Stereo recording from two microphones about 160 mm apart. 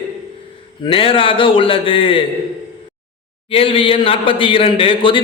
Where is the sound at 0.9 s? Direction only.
35° left (ahead or behind).